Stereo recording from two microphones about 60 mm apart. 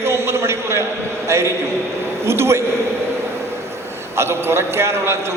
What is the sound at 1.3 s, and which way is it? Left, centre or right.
A man's voice, right.